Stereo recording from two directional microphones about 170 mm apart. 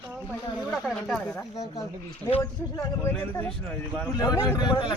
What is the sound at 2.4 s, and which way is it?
Speech, 20° left (ahead or behind).